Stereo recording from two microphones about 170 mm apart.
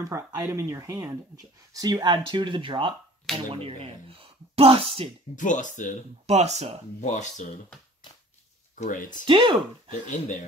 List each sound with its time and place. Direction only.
0.0 s speech: 20° right (ahead or behind); by 5.1 s 35° right (ahead or behind)
5.3 s speech: 45° left (ahead or behind)
6.2 s speech: 40° right (ahead or behind)
7.0 s speech: 45° left (ahead or behind)
8.7 s speech: 45° left (ahead or behind)
9.2 s speech: 30° right (ahead or behind)
10.0 s speech: 50° left (ahead or behind)